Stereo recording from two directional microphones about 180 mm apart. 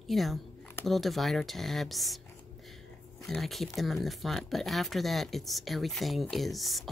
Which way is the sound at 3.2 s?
Centre (ahead or behind).